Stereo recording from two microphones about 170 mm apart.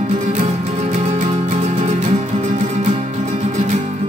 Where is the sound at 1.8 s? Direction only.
40° right (ahead or behind).